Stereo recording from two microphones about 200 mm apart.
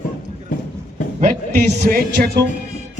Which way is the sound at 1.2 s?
45° right (ahead or behind).